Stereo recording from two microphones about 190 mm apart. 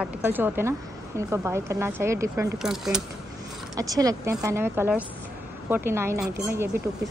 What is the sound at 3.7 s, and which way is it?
A woman's voice, 20° right (ahead or behind).